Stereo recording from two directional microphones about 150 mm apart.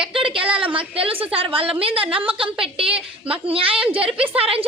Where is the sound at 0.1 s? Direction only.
35° right (ahead or behind).